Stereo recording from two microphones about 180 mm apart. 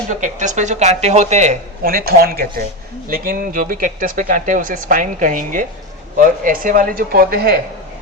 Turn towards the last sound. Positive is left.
turn(degrees=-60)  # may be behind; listen again after turning